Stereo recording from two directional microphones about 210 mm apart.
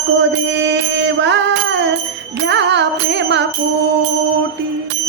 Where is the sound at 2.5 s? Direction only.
55° right (ahead or behind).